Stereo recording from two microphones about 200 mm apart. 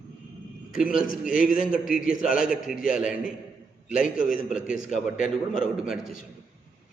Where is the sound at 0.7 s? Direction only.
45° left (ahead or behind).